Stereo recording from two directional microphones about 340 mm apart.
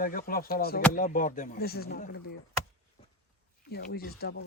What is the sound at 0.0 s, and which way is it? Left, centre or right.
Speech, left.